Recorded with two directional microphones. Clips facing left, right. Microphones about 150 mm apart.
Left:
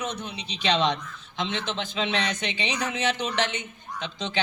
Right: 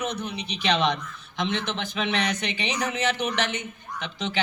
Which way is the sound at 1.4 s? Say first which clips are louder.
Right 2 dB; 20° left (ahead or behind).